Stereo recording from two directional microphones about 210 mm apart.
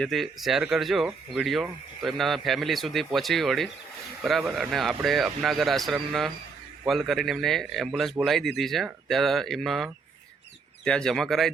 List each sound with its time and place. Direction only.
0.0 s speech: centre (ahead or behind)